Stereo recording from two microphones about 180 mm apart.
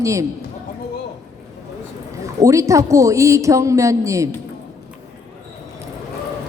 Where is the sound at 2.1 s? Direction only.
15° right (ahead or behind).